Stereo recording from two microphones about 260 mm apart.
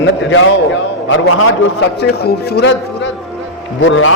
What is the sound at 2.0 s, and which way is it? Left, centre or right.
A man's voice, left.